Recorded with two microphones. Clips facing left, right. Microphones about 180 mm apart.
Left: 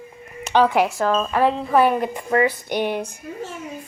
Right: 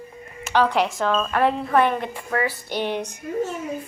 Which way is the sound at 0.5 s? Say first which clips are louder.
Left 3 dB; 10° left (ahead or behind).